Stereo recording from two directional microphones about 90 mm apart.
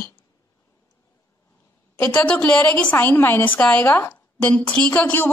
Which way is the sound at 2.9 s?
25° left (ahead or behind).